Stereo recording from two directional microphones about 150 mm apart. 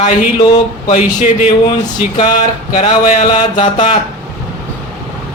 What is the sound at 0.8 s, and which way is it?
Speech, 50° left (ahead or behind).